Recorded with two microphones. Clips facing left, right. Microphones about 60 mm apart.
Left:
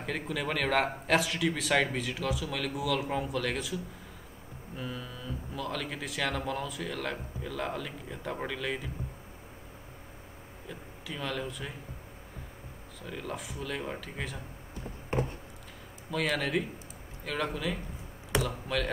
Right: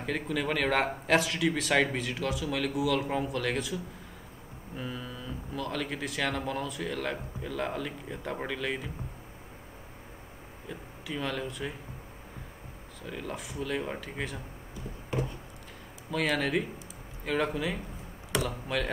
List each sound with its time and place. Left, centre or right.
0.0 s speech: centre
10.7 s speech: centre
13.0 s speech: centre
15.2 s a sound: left
16.1 s speech: centre